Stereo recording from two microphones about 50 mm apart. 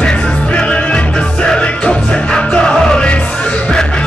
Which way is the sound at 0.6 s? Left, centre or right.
Left.